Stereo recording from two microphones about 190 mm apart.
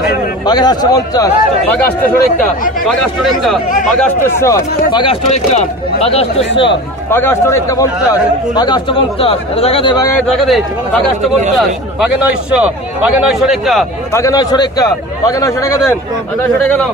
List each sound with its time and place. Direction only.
0.5 s a man's voice: 20° left (ahead or behind); by 3.5 s centre (ahead or behind)
4.0 s a man's voice: 15° left (ahead or behind)
5.0 s speech: 35° left (ahead or behind)
7.1 s a man's voice: 10° left (ahead or behind); by 10.0 s 25° left (ahead or behind)
10.2 s speech: centre (ahead or behind)
14.1 s a man's voice: 15° left (ahead or behind)